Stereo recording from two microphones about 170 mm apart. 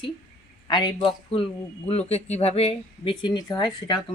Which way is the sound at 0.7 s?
20° left (ahead or behind).